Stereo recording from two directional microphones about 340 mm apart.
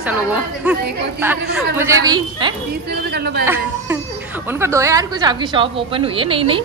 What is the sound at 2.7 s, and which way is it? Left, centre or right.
Speech, right.